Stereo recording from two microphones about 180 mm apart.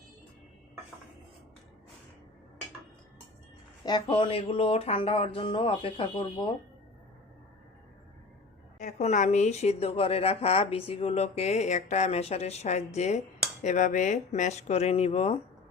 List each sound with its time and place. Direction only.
3.8 s speech: 25° left (ahead or behind)
8.8 s a woman's voice: 40° left (ahead or behind)